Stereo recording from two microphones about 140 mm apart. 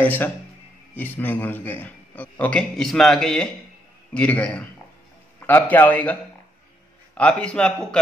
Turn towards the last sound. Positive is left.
turn(degrees=5)  # may be behind; listen again after turning